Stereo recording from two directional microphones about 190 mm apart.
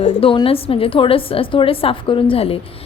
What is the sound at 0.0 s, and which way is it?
A woman's voice, 30° left (ahead or behind).